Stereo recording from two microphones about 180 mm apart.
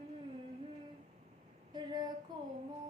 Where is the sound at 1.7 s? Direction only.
25° right (ahead or behind).